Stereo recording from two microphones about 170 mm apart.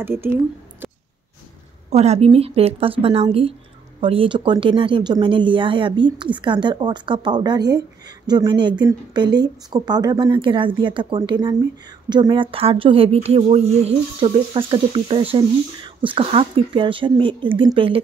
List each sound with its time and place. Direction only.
0.0 s speech: 15° right (ahead or behind)
1.9 s speech: 40° right (ahead or behind)